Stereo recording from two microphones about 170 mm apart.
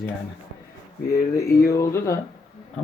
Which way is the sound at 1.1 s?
20° left (ahead or behind).